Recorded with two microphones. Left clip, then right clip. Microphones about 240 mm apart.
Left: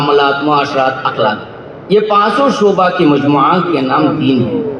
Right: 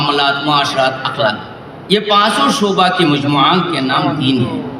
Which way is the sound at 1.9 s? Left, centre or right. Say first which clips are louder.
Left 2 dB; right.